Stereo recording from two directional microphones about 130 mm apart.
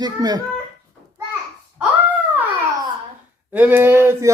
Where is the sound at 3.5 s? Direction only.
15° right (ahead or behind).